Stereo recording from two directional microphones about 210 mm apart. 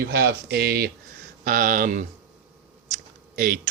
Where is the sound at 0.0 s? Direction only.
50° right (ahead or behind).